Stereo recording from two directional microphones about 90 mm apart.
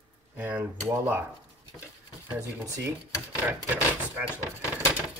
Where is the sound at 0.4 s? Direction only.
20° right (ahead or behind).